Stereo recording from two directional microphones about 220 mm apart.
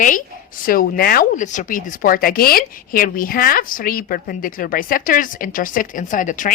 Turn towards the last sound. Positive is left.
turn(degrees=35)  # may be behind; listen again after turning